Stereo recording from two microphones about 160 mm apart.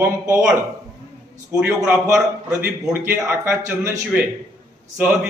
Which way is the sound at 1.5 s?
5° right (ahead or behind).